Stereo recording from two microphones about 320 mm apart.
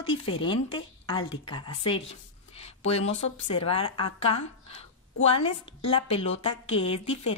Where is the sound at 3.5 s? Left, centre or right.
Centre.